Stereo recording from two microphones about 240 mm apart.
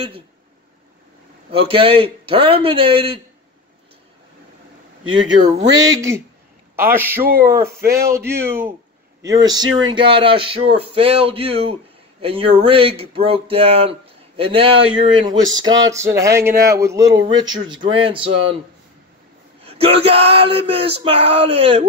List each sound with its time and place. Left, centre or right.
1.7 s speech: right
5.0 s speech: right
5.8 s speech: centre
7.2 s speech: right
7.9 s speech: centre
19.8 s speech: right